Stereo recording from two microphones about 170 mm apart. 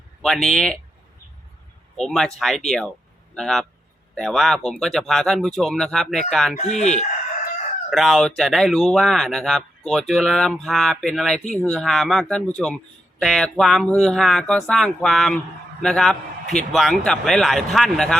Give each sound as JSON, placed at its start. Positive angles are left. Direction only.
{"t": 0.2, "sound": "speech", "side_deg": 0}
{"t": 2.0, "sound": "speech", "side_deg": 5}
{"t": 6.6, "sound": "speech", "side_deg": 40}
{"t": 7.9, "sound": "speech", "side_deg": 0}